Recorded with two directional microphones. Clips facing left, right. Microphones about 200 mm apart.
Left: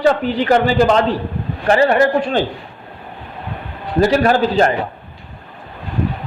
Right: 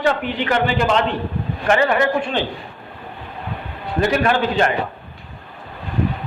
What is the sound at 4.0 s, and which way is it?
Speech, 35° left (ahead or behind).